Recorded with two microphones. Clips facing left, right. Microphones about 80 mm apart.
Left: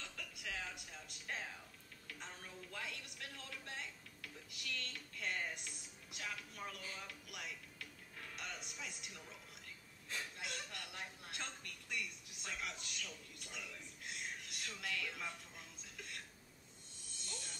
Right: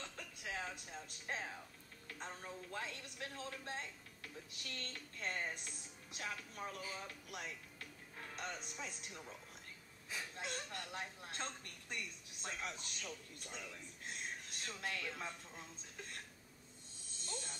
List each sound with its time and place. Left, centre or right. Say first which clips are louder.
0.0 s music: right 1 dB; right
1.3 s a sound: right 2 dB; right
2.0 s a man's voice: right 4 dB; right
7.0 s music: right 2 dB; right
8.7 s a man's voice: right 2 dB; right
10.3 s a woman's voice: right 3 dB; right
17.2 s insect: right 4 dB; right